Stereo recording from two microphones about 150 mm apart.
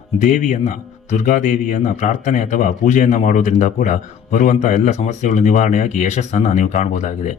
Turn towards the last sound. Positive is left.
turn(degrees=55)  # may be behind; listen again after turning